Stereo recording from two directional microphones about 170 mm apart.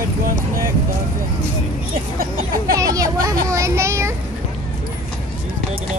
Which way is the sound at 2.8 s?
20° right (ahead or behind).